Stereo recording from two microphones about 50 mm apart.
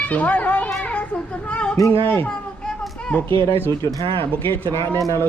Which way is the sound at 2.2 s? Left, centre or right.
Left.